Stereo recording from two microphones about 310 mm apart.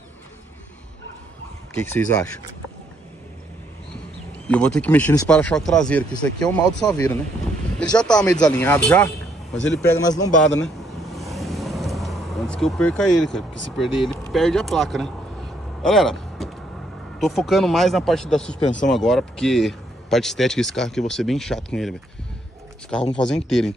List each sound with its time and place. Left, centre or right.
1.8 s speech: centre
4.5 s speech: centre
9.6 s speech: left
10.2 s speech: centre
11.1 s vehicle: centre
13.7 s speech: centre
23.1 s speech: centre